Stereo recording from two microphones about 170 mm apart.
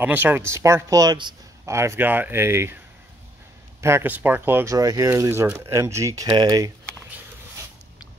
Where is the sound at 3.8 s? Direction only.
15° right (ahead or behind).